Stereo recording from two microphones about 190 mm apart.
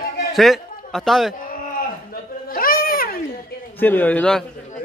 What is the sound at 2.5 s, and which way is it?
Baby cry, 50° left (ahead or behind).